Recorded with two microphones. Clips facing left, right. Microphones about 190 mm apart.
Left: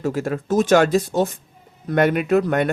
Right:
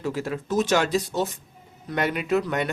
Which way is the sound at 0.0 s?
50° left (ahead or behind).